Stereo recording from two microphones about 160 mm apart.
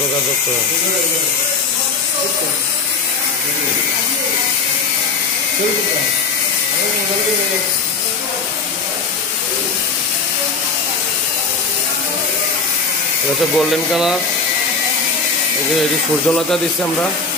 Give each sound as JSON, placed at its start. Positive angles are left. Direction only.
{"t": 13.6, "sound": "speech", "side_deg": 0}
{"t": 16.3, "sound": "speech", "side_deg": 5}